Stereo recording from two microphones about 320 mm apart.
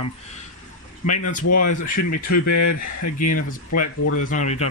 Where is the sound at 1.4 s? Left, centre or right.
Left.